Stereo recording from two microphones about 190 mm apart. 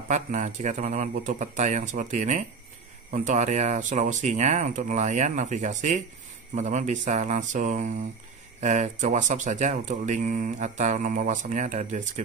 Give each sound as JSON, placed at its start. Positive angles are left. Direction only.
{"t": 0.1, "sound": "speech", "side_deg": -40}